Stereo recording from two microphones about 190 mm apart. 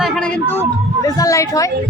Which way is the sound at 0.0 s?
5° left (ahead or behind).